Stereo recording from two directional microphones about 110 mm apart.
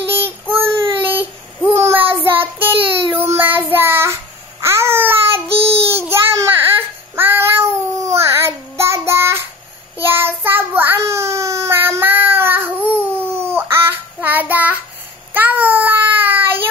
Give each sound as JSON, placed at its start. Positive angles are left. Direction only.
{"t": 0.1, "sound": "child singing", "side_deg": -20}
{"t": 3.7, "sound": "babbling", "side_deg": -20}
{"t": 5.9, "sound": "a sound", "side_deg": -25}
{"t": 7.2, "sound": "child singing", "side_deg": -20}
{"t": 13.3, "sound": "a sound", "side_deg": -20}
{"t": 14.2, "sound": "child singing", "side_deg": -15}